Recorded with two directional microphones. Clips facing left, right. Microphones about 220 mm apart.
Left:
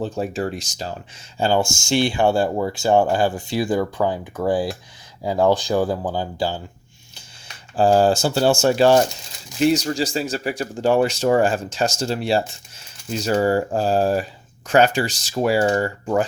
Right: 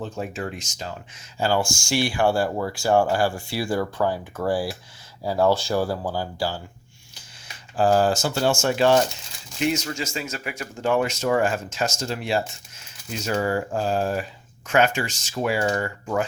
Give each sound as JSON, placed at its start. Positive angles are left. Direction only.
{"t": 0.0, "sound": "a man's voice", "side_deg": 35}
{"t": 1.4, "sound": "speech", "side_deg": 25}
{"t": 7.8, "sound": "a man's voice", "side_deg": 30}